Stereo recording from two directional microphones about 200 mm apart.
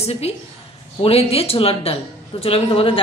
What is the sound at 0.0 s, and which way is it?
A woman's voice, 30° left (ahead or behind).